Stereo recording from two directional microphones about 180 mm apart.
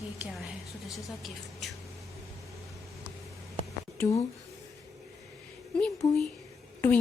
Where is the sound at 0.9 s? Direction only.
Centre (ahead or behind).